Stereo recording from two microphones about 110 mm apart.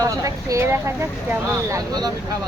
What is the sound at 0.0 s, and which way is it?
Speech, 30° right (ahead or behind).